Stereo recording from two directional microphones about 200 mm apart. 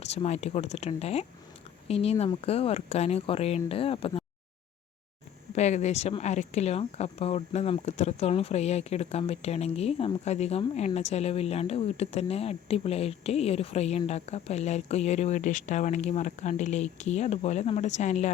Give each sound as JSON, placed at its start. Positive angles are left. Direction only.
{"t": 0.0, "sound": "speech", "side_deg": 35}
{"t": 5.5, "sound": "speech", "side_deg": 35}